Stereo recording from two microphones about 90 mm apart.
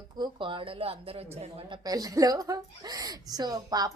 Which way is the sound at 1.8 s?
45° right (ahead or behind).